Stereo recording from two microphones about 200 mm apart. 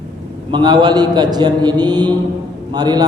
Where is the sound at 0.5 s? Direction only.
20° right (ahead or behind).